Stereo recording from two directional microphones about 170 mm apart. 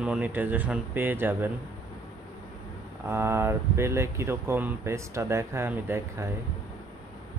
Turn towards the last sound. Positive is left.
turn(degrees=-15)  # may be behind; listen again after turning